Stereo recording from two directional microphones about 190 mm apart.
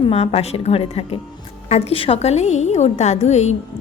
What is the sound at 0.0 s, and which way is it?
A woman's voice, 30° left (ahead or behind).